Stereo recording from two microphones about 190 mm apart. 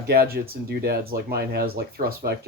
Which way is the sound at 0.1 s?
55° right (ahead or behind).